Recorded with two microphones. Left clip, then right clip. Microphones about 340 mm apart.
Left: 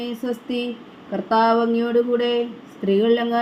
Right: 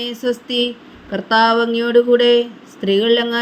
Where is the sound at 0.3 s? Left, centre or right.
Right.